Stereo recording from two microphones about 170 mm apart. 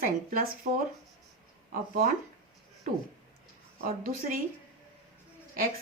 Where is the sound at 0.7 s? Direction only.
50° right (ahead or behind).